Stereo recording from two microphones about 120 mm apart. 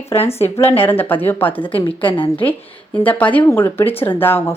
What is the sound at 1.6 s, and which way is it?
Speech, 50° left (ahead or behind).